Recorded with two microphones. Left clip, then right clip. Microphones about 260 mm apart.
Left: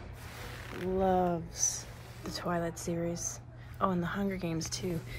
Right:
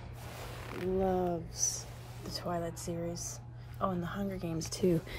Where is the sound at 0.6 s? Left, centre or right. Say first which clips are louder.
Right 1 dB; right.